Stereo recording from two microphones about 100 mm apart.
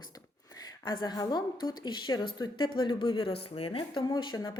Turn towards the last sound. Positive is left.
turn(degrees=45)  # may be behind; listen again after turning